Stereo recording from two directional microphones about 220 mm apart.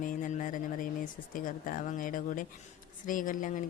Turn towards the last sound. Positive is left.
turn(degrees=35)  # may be behind; listen again after turning